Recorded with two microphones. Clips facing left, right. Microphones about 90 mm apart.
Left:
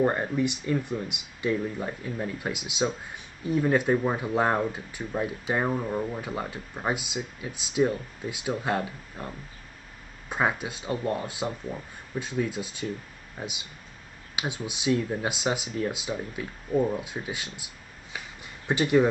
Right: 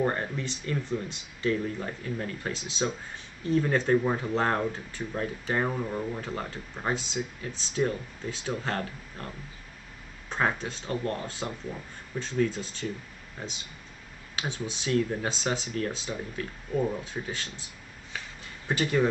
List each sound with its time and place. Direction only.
0.0 s speech: 10° left (ahead or behind)
10.3 s speech: 10° left (ahead or behind)
18.1 s a sound: 15° left (ahead or behind)